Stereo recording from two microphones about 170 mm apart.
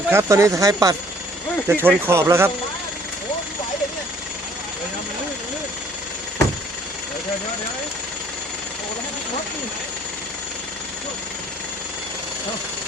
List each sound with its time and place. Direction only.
0.1 s speech: 15° right (ahead or behind)